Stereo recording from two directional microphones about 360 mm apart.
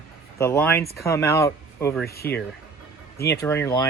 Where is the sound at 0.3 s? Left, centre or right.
Centre.